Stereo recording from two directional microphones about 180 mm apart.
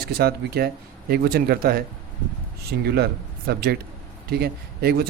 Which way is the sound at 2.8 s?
60° right (ahead or behind).